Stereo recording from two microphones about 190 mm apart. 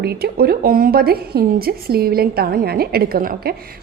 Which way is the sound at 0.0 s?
55° right (ahead or behind).